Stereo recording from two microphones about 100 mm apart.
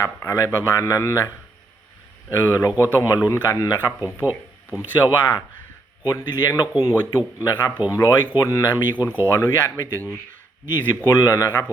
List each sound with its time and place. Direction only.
0.0 s a man's voice: 30° left (ahead or behind)
2.4 s speech: 30° left (ahead or behind)
4.8 s speech: 50° left (ahead or behind)
9.3 s speech: 30° left (ahead or behind)